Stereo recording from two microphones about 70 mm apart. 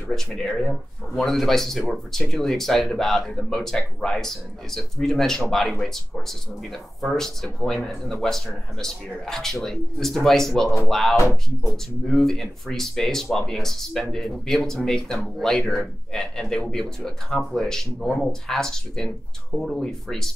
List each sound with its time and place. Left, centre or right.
0.1 s speech: centre
11.1 s music: left
11.7 s speech: centre